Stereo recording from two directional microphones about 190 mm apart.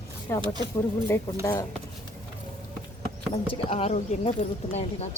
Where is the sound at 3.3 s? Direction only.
30° left (ahead or behind).